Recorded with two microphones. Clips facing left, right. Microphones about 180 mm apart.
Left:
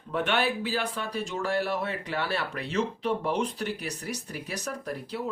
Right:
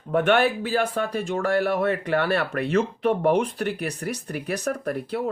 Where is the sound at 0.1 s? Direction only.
50° right (ahead or behind).